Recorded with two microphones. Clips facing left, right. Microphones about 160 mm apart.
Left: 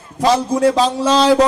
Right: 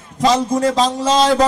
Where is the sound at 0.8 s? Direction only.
60° left (ahead or behind).